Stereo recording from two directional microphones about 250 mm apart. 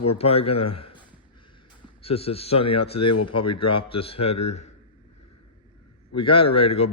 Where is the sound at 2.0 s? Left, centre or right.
Left.